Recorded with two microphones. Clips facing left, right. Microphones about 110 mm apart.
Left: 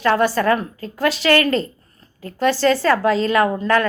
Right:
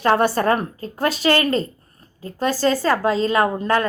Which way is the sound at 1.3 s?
25° right (ahead or behind).